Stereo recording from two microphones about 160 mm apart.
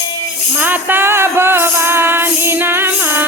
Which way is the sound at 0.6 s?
10° right (ahead or behind).